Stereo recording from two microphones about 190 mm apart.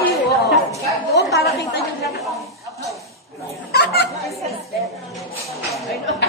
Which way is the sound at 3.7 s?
55° left (ahead or behind).